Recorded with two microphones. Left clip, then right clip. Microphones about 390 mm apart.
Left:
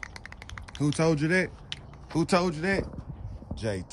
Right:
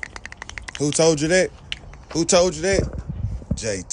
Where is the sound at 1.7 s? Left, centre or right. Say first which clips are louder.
Right 8 dB; centre.